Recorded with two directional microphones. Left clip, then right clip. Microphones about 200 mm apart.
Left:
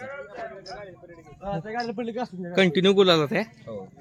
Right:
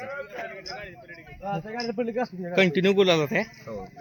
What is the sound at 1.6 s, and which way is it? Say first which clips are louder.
A man's voice: even; 25° left (ahead or behind).